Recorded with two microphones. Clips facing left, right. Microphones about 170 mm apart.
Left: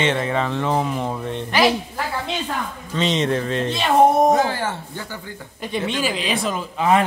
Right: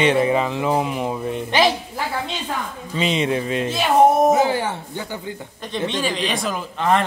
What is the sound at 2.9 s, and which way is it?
A man's voice, 10° right (ahead or behind).